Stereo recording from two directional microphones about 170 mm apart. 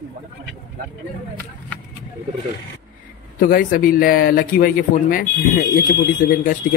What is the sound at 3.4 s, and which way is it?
Speech, 55° left (ahead or behind).